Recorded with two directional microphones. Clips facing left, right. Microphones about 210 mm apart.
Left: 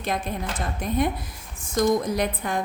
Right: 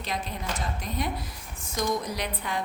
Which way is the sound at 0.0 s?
50° left (ahead or behind).